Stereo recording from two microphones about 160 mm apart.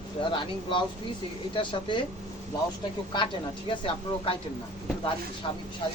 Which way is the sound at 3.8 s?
35° left (ahead or behind).